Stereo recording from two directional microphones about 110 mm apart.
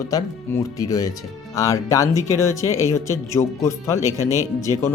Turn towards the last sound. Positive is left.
turn(degrees=-30)  # may be behind; listen again after turning